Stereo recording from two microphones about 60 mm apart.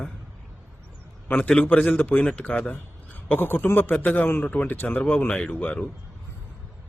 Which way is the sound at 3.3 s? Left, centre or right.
Left.